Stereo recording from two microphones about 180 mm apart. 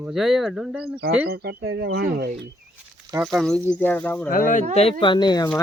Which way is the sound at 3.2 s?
Centre (ahead or behind).